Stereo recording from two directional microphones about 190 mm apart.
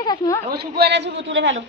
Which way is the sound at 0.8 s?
65° right (ahead or behind).